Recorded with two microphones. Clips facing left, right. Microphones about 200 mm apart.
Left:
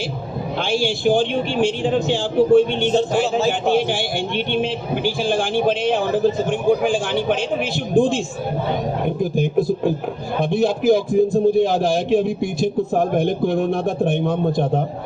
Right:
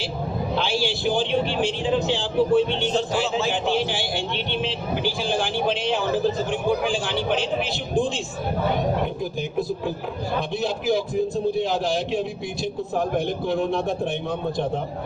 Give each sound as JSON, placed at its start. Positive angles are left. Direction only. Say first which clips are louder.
{"t": 0.6, "sound": "speech", "louder": "left 7 dB", "side_deg": 50}